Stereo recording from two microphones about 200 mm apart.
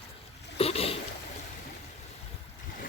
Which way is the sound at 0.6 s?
30° left (ahead or behind).